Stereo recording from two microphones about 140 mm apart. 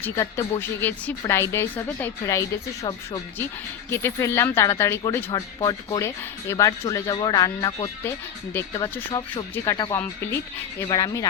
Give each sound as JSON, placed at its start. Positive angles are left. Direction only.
{"t": 0.0, "sound": "a woman's voice", "side_deg": 20}
{"t": 10.0, "sound": "a woman's voice", "side_deg": 15}
{"t": 10.8, "sound": "speech", "side_deg": 25}